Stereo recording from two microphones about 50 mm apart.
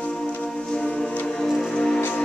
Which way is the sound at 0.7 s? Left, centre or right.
Centre.